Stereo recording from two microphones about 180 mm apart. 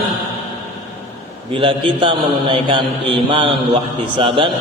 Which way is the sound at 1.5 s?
30° right (ahead or behind).